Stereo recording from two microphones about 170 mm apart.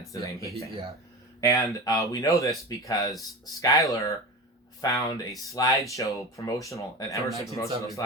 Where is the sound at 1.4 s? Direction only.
20° left (ahead or behind).